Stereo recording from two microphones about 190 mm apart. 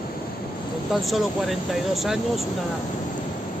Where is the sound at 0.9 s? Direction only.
Centre (ahead or behind).